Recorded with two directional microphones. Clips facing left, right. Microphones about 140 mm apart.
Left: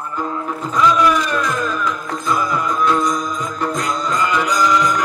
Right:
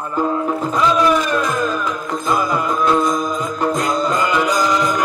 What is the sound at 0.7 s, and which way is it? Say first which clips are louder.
Music: left 1 dB; 25° right (ahead or behind).